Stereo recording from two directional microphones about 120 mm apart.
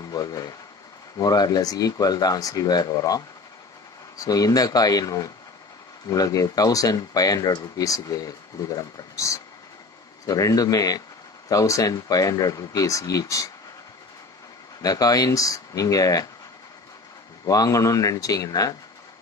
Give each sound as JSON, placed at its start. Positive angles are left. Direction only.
{"t": 0.1, "sound": "speech", "side_deg": 30}
{"t": 14.8, "sound": "speech", "side_deg": 30}
{"t": 17.5, "sound": "speech", "side_deg": 30}